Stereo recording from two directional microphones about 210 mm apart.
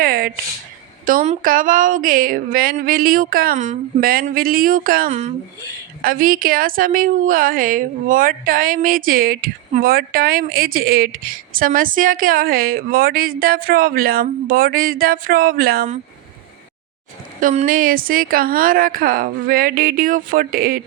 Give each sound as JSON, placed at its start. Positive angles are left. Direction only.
{"t": 0.0, "sound": "a sound", "side_deg": -45}
{"t": 1.0, "sound": "a woman's voice", "side_deg": -35}
{"t": 17.4, "sound": "a woman's voice", "side_deg": -35}